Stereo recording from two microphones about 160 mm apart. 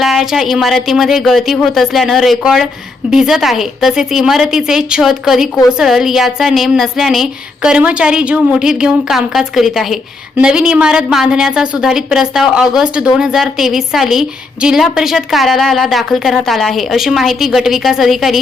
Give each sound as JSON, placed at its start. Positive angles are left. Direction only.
{"t": 0.0, "sound": "a woman's voice", "side_deg": 0}